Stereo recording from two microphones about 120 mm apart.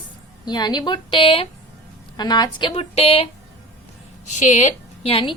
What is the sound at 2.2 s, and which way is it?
A woman's voice, 35° left (ahead or behind).